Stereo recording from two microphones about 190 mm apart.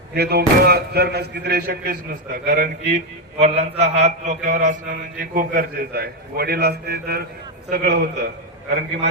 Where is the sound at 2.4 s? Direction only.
50° right (ahead or behind).